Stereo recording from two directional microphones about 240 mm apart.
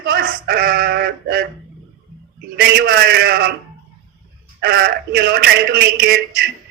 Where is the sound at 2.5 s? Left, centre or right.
Right.